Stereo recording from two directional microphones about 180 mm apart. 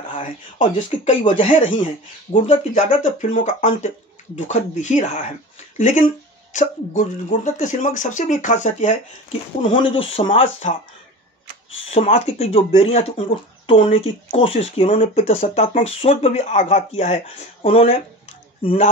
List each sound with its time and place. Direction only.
0.1 s speech: 35° left (ahead or behind)
1.6 s speech: 30° left (ahead or behind)
2.3 s speech: 40° left (ahead or behind)
6.5 s speech: 45° left (ahead or behind)
11.9 s speech: 40° left (ahead or behind)